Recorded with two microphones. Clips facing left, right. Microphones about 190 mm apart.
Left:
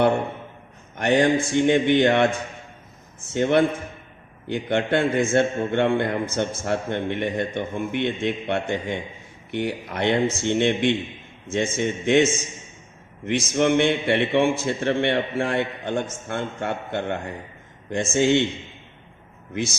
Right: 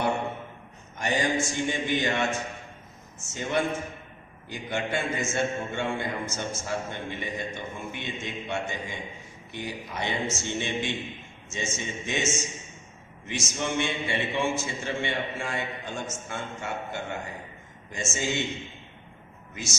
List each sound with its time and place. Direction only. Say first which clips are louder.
0.9 s a man's voice: left 8 dB; 60° left (ahead or behind)